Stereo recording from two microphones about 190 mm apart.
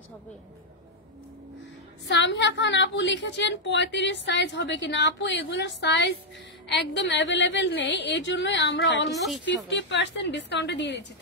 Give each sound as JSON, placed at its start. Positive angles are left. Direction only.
{"t": 2.0, "sound": "a woman's voice", "side_deg": 70}
{"t": 9.1, "sound": "a woman's voice", "side_deg": 0}
{"t": 9.7, "sound": "a woman's voice", "side_deg": 70}